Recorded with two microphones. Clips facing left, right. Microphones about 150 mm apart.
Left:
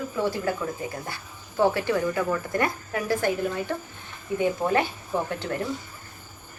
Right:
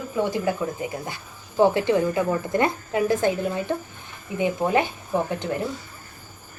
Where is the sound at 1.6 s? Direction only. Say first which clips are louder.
Right 4 dB; 20° right (ahead or behind).